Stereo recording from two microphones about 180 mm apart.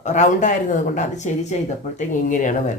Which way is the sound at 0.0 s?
45° left (ahead or behind).